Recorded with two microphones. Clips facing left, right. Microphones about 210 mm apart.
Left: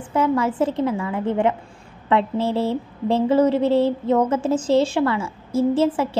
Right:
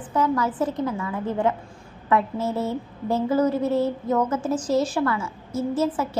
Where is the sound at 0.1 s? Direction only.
25° left (ahead or behind).